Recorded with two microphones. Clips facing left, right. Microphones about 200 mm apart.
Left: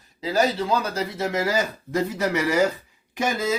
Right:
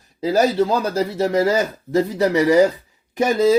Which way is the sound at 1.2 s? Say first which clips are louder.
Right 7 dB; 30° right (ahead or behind).